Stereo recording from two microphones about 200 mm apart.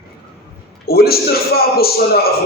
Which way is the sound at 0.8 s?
50° left (ahead or behind).